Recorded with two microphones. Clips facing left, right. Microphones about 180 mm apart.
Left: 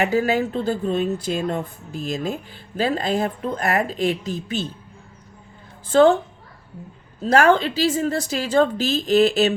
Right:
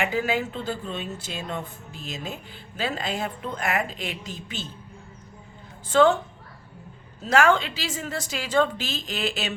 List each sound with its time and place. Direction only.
0.0 s speech: 40° left (ahead or behind)
5.9 s speech: 35° left (ahead or behind)
7.2 s speech: 40° left (ahead or behind)